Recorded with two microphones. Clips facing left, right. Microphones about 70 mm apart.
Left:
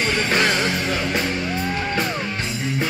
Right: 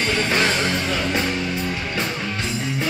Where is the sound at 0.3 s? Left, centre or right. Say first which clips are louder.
Left 2 dB; centre.